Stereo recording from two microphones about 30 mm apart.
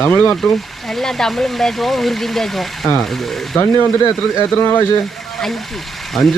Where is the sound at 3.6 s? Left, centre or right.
Left.